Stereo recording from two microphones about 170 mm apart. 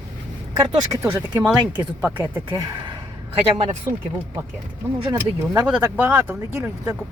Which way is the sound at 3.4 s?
30° right (ahead or behind).